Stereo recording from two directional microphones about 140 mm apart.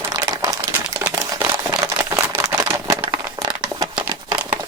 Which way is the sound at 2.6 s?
20° right (ahead or behind).